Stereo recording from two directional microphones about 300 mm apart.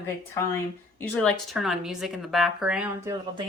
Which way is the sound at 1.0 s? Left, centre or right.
Centre.